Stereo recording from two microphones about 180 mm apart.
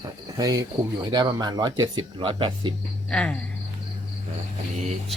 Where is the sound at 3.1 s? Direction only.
5° left (ahead or behind).